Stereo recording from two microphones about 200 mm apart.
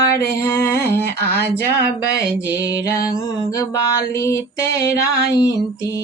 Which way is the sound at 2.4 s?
15° left (ahead or behind).